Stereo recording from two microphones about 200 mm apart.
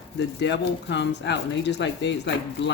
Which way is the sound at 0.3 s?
60° left (ahead or behind).